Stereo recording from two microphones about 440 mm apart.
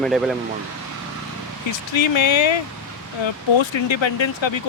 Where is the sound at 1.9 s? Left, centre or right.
Left.